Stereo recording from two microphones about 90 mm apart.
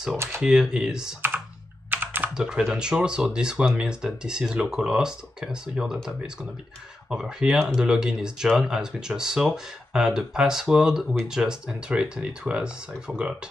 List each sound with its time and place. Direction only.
0.4 s speech: 5° right (ahead or behind)
1.9 s computer keyboard: 20° right (ahead or behind)
2.3 s speech: 5° right (ahead or behind)
7.1 s speech: 5° right (ahead or behind)